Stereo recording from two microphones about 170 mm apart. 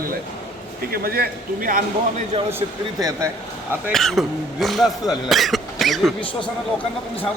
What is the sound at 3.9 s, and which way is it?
Speech, centre (ahead or behind).